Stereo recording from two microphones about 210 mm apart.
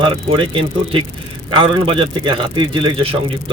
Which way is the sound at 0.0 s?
25° right (ahead or behind).